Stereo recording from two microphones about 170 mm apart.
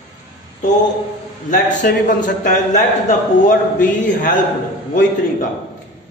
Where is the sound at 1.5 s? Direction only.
50° left (ahead or behind).